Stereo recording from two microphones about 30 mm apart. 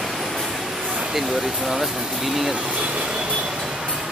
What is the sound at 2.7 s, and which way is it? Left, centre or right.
Speech, right.